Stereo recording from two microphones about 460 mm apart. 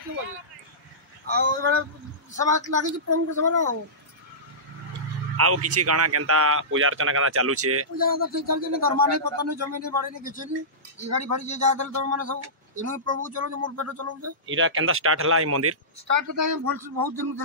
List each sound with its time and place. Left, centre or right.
1.3 s speech: right
5.4 s speech: right
10.2 s speech: centre
11.1 s speech: right